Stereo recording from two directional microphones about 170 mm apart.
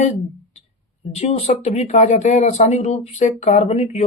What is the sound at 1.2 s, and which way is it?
Speech, 40° left (ahead or behind).